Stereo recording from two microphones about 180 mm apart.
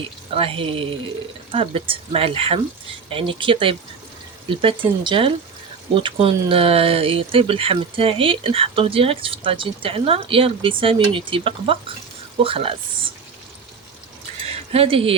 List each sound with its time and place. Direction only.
0.3 s speech: 30° right (ahead or behind)
14.5 s speech: 35° right (ahead or behind)